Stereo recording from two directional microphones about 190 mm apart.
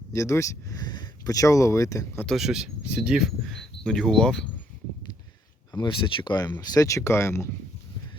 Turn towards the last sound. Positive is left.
turn(degrees=15)  # may be behind; listen again after turning